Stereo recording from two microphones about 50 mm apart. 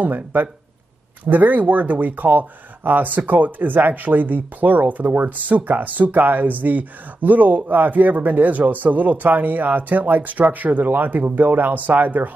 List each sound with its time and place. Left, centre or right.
0.0 s speech: right